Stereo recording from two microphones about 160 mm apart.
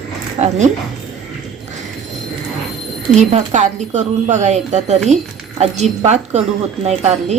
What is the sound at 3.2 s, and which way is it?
Speech, 45° right (ahead or behind).